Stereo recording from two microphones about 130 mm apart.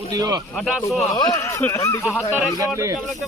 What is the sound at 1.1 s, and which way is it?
Speech, 25° left (ahead or behind).